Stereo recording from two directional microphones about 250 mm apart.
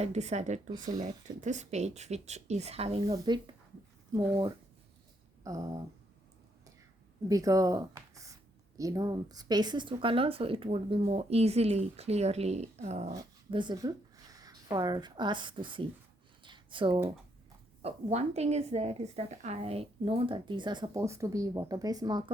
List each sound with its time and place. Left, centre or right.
0.0 s a woman's voice: right
7.3 s a woman's voice: centre
16.4 s a sound: centre
17.8 s a woman's voice: right